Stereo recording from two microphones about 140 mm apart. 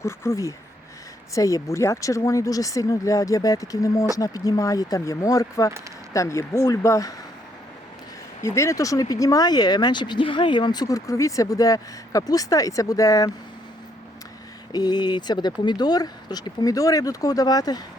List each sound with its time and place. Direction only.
0.0 s speech: 20° left (ahead or behind)
8.4 s speech: 20° left (ahead or behind)
14.7 s speech: 30° left (ahead or behind)